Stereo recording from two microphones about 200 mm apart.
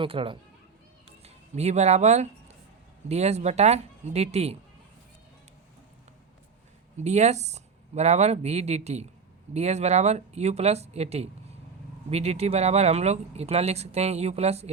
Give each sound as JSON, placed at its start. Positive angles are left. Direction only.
{"t": 0.0, "sound": "speech", "side_deg": -25}
{"t": 6.9, "sound": "speech", "side_deg": -35}